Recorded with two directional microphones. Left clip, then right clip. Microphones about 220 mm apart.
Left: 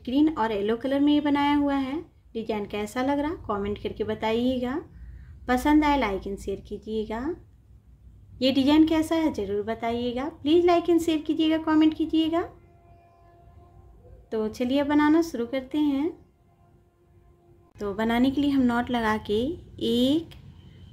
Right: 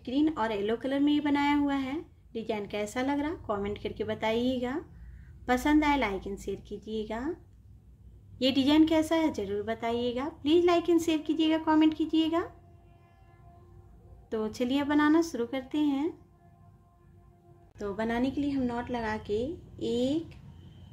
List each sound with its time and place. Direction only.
0.0 s speech: 10° left (ahead or behind)
8.4 s speech: centre (ahead or behind)
14.3 s speech: centre (ahead or behind)
17.7 s a woman's voice: 5° left (ahead or behind)